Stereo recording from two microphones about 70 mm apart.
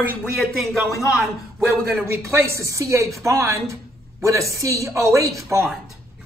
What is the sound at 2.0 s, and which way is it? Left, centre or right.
Speech, right.